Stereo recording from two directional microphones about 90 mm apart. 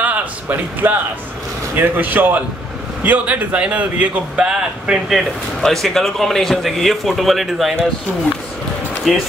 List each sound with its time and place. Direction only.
0.0 s a sound: 15° right (ahead or behind)
1.8 s speech: 20° right (ahead or behind)
5.6 s a man's voice: 5° left (ahead or behind)
9.1 s a man's voice: 5° right (ahead or behind)